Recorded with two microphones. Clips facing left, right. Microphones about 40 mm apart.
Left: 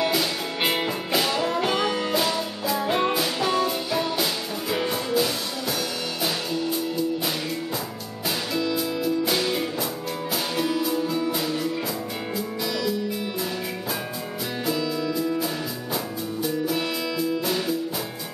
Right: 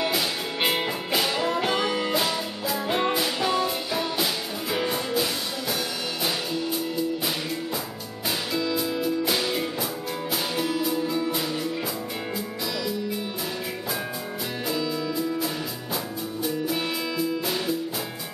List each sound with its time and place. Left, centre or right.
0.0 s music: centre
8.5 s music: centre
14.7 s music: centre